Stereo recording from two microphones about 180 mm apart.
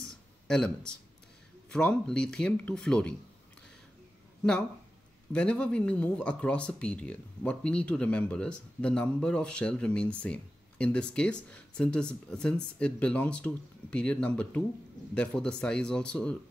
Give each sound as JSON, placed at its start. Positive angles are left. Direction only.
{"t": 0.0, "sound": "a sound", "side_deg": 5}
{"t": 1.7, "sound": "speech", "side_deg": 5}
{"t": 5.3, "sound": "speech", "side_deg": 5}